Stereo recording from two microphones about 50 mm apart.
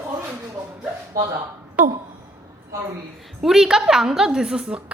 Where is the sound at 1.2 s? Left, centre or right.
Right.